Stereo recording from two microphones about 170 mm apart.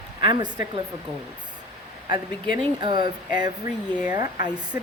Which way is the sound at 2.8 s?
25° right (ahead or behind).